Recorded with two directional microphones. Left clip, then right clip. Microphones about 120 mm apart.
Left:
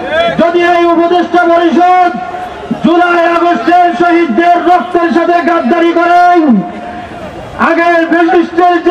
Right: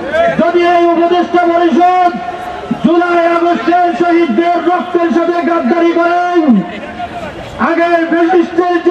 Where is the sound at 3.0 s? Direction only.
40° left (ahead or behind).